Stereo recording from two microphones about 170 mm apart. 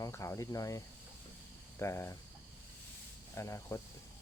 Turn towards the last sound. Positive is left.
turn(degrees=15)  # may be behind; listen again after turning